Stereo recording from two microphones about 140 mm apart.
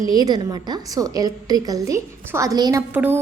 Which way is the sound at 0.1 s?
30° right (ahead or behind).